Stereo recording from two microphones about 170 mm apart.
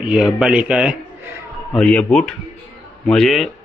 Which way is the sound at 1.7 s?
5° left (ahead or behind).